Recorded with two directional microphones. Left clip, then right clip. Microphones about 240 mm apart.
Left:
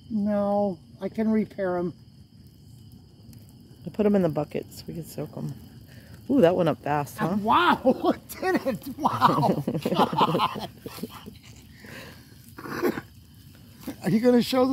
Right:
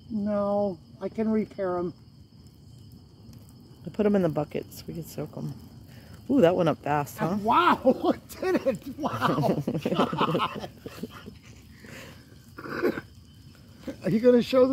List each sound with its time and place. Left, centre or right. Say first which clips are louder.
0.2 s speech: left 1 dB; left
3.8 s speech: left 1 dB; centre
7.4 s speech: left 1 dB; left
9.5 s speech: left 1 dB; centre
9.9 s speech: left 4 dB; left
11.8 s a sound: left 2 dB; centre
12.5 s a sound: even; left
13.8 s speech: right 1 dB; left